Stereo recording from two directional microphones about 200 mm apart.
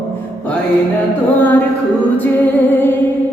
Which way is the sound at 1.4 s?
10° left (ahead or behind).